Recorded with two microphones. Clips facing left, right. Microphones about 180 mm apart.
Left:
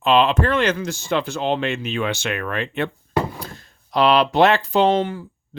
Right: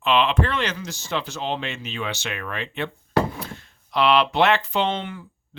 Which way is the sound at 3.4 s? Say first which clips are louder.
Even; 40° left (ahead or behind).